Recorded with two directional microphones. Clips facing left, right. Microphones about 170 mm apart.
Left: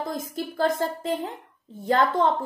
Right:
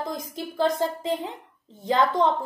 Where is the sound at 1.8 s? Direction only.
5° left (ahead or behind).